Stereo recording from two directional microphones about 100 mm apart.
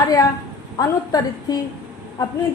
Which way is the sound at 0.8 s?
40° left (ahead or behind).